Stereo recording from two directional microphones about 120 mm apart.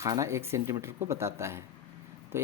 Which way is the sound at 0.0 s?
25° right (ahead or behind).